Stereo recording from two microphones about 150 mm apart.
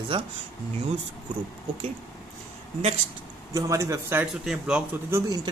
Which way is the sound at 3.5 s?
20° right (ahead or behind).